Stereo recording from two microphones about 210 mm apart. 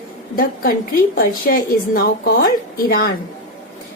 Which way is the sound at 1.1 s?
45° left (ahead or behind).